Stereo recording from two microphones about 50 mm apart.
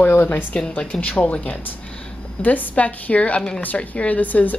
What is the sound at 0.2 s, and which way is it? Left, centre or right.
Speech, left.